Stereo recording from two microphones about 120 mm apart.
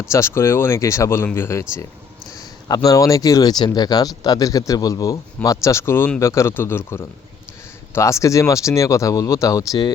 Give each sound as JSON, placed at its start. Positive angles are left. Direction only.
{"t": 0.0, "sound": "speech", "side_deg": 20}
{"t": 2.6, "sound": "speech", "side_deg": 30}